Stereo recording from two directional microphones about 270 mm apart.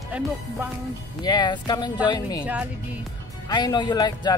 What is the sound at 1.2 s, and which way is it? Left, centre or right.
Speech, centre.